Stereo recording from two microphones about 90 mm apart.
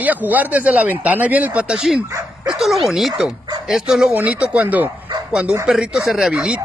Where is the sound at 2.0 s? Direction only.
35° right (ahead or behind).